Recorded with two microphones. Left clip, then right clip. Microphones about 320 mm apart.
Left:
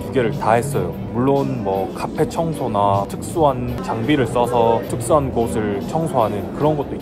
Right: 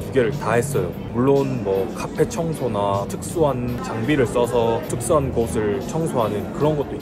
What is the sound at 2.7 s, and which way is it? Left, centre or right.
Speech, centre.